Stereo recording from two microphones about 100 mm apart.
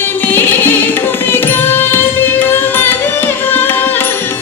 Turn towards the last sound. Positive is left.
turn(degrees=20)  # may be behind; listen again after turning